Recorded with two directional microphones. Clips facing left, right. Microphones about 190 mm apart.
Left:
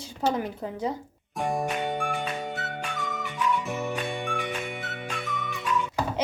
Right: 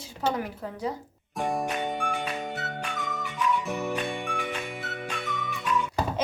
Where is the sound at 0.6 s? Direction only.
25° left (ahead or behind).